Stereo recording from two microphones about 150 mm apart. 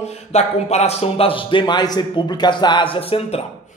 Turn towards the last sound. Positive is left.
turn(degrees=40)  # may be behind; listen again after turning